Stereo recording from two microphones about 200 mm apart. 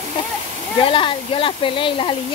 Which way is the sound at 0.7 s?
25° left (ahead or behind).